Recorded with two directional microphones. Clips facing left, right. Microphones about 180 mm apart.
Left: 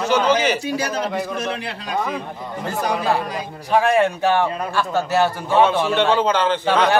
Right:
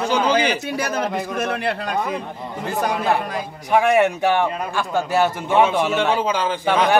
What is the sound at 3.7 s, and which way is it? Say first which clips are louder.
A man's voice: right 1 dB; 15° right (ahead or behind).